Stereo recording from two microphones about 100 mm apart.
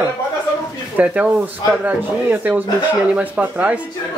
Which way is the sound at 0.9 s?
15° right (ahead or behind).